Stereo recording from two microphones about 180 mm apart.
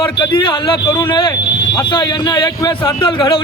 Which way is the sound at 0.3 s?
25° left (ahead or behind).